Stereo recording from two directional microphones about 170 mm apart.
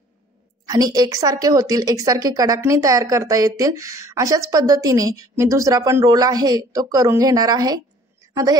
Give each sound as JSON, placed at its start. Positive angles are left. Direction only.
{"t": 0.7, "sound": "a woman's voice", "side_deg": -20}